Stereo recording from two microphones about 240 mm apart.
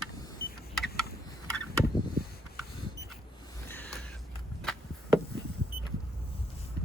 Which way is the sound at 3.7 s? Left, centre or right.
Centre.